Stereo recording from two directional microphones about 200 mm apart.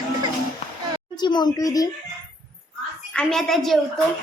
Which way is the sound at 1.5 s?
20° left (ahead or behind).